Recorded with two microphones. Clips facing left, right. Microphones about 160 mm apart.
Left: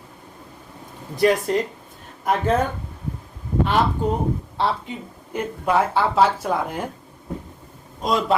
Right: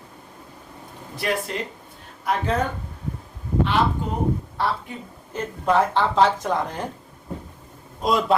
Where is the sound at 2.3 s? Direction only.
50° left (ahead or behind).